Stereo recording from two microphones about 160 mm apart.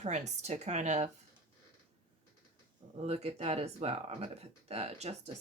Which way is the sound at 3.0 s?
40° right (ahead or behind).